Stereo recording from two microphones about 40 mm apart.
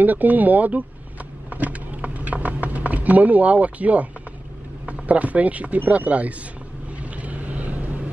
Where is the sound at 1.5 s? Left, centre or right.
Right.